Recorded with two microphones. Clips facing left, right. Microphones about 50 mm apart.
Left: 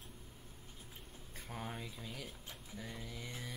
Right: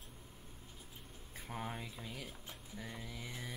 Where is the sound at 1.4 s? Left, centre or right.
Centre.